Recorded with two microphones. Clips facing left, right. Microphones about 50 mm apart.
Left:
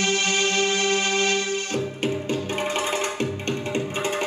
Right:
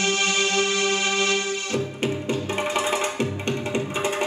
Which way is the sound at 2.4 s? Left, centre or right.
Right.